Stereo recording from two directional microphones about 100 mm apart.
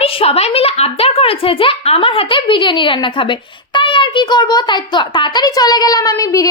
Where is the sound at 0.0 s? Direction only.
85° left.